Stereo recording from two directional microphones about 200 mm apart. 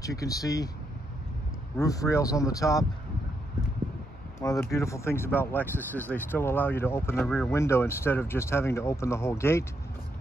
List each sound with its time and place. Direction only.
0.0 s speech: 15° left (ahead or behind)
1.8 s speech: 15° left (ahead or behind)
4.4 s speech: 15° left (ahead or behind)